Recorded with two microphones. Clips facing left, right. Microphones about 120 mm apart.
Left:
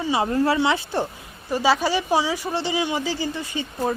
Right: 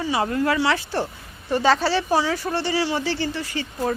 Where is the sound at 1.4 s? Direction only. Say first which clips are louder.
Right 1 dB; 10° left (ahead or behind).